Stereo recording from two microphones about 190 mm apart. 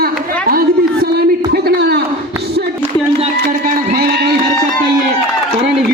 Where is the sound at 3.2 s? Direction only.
45° right (ahead or behind).